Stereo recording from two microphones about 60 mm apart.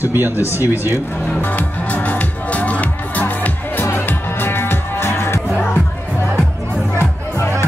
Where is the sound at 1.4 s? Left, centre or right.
Left.